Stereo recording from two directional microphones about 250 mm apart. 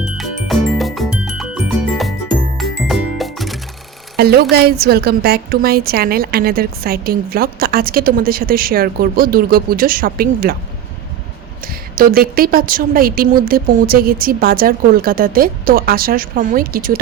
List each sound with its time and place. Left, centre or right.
0.0 s music: centre
4.2 s a woman's voice: right
11.6 s a woman's voice: right